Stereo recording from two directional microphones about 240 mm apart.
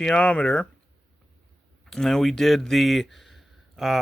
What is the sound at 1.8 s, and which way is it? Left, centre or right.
Speech, centre.